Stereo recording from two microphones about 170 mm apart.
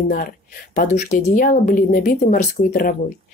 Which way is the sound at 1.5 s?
55° left (ahead or behind).